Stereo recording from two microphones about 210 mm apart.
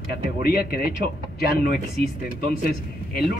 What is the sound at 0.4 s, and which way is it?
Speech, 45° left (ahead or behind).